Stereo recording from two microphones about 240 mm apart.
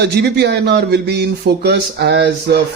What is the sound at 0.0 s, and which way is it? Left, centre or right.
Speech, right.